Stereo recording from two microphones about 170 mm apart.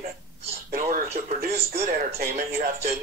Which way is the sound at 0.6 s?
55° right (ahead or behind).